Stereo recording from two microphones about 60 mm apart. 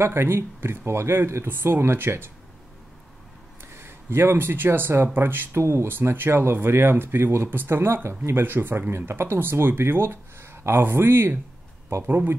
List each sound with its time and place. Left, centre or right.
0.0 s speech: right
3.6 s speech: right